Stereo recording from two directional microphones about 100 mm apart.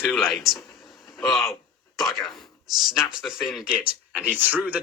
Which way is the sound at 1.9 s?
Centre (ahead or behind).